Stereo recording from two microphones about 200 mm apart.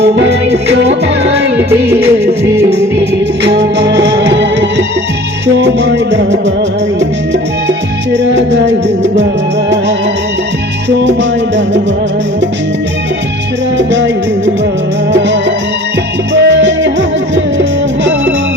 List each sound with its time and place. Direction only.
0.0 s music: 55° right (ahead or behind)
1.9 s music: 15° right (ahead or behind)
3.4 s music: 60° right (ahead or behind)
8.1 s music: 60° right (ahead or behind)
10.8 s music: 60° right (ahead or behind)
13.7 s music: 65° right (ahead or behind)
15.1 s music: 65° right (ahead or behind)